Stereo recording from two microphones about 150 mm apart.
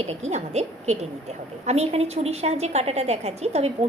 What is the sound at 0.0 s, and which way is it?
A woman's voice, 45° right (ahead or behind).